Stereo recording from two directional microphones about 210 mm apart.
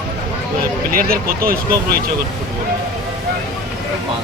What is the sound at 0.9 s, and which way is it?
Speech, 45° right (ahead or behind).